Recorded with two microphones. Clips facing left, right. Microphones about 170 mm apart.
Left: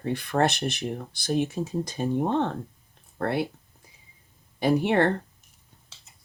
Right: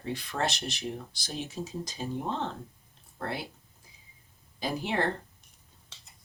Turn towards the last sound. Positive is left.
turn(degrees=60)  # may be behind; listen again after turning